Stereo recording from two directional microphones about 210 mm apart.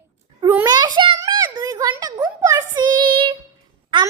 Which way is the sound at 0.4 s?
15° right (ahead or behind).